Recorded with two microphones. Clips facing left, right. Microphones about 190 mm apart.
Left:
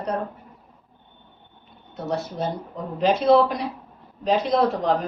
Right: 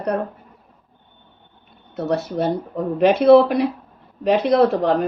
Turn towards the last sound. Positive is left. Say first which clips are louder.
# right 5 dB
turn(degrees=-65)  # may be behind; listen again after turning